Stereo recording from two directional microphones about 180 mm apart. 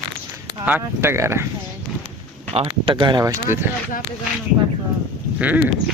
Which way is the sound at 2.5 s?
30° right (ahead or behind).